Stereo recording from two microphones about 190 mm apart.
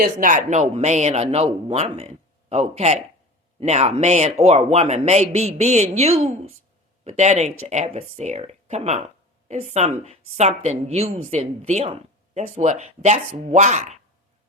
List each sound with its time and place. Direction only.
0.0 s speech: 45° right (ahead or behind)